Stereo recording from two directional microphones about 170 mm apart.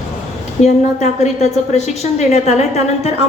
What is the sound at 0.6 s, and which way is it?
A woman's voice, 40° left (ahead or behind).